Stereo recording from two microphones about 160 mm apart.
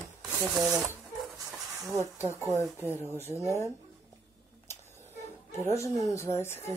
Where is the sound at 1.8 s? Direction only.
20° right (ahead or behind).